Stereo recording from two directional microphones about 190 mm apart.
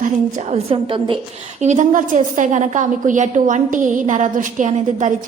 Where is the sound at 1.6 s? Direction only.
40° right (ahead or behind).